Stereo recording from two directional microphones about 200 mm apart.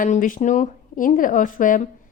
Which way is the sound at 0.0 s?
40° left (ahead or behind).